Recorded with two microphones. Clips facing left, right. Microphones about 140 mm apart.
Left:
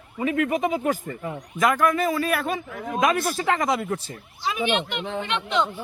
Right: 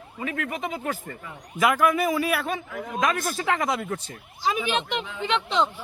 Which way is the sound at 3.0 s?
10° left (ahead or behind).